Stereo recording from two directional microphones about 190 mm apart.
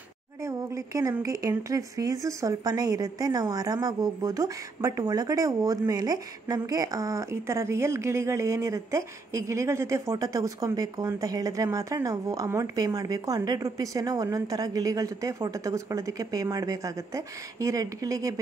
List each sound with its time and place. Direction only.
0.4 s speech: 15° right (ahead or behind)